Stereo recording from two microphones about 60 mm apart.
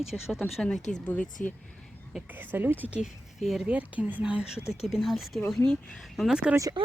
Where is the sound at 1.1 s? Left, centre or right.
Left.